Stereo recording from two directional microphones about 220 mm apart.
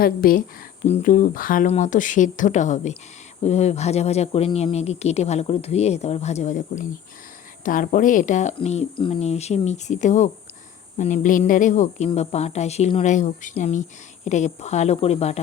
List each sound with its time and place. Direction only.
0.0 s speech: 40° left (ahead or behind)